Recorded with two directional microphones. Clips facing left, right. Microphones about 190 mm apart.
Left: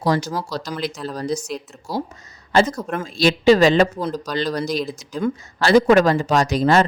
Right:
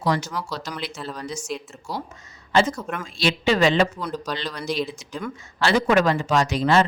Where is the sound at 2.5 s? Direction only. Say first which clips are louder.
Left 3 dB; 40° left (ahead or behind).